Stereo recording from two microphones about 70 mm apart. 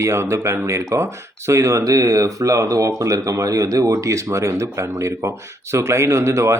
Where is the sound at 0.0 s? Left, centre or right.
Right.